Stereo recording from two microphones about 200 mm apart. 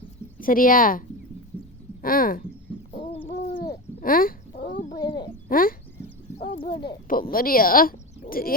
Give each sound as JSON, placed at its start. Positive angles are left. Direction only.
{"t": 0.3, "sound": "speech", "side_deg": 45}
{"t": 2.7, "sound": "chicken", "side_deg": -5}
{"t": 3.3, "sound": "a sound", "side_deg": 50}
{"t": 4.9, "sound": "speech", "side_deg": 20}
{"t": 5.5, "sound": "speech", "side_deg": 45}
{"t": 7.1, "sound": "speech", "side_deg": 45}